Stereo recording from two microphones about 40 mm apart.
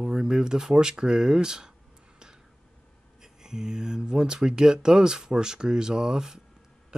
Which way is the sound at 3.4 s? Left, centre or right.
Centre.